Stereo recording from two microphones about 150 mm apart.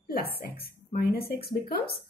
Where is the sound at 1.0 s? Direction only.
90° left.